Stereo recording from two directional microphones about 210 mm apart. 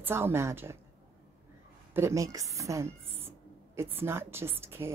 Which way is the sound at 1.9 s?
15° right (ahead or behind).